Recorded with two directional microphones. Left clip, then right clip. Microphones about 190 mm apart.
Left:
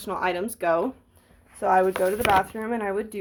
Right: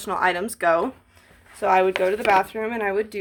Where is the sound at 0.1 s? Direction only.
10° left (ahead or behind).